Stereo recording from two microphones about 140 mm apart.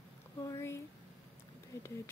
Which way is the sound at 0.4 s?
20° left (ahead or behind).